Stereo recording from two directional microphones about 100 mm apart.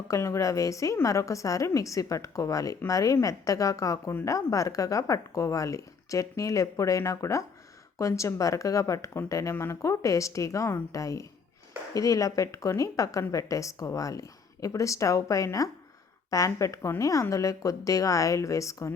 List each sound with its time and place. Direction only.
0.1 s a woman's voice: 30° left (ahead or behind)